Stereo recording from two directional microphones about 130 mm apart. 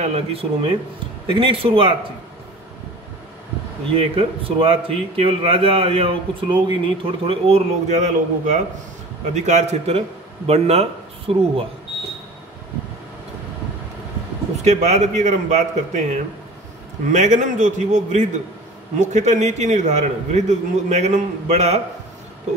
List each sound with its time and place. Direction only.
0.0 s a man's voice: 50° right (ahead or behind)
3.9 s a man's voice: 45° right (ahead or behind)
7.4 s a man's voice: 60° right (ahead or behind)
14.6 s a man's voice: 60° right (ahead or behind)